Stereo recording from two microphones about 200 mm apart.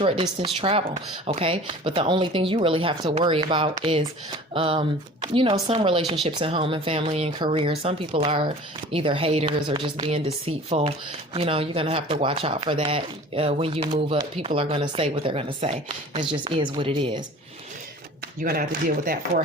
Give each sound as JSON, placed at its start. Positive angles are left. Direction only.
{"t": 0.0, "sound": "speech", "side_deg": -30}
{"t": 18.3, "sound": "speech", "side_deg": -50}